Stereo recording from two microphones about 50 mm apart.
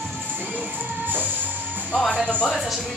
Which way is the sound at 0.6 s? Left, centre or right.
Right.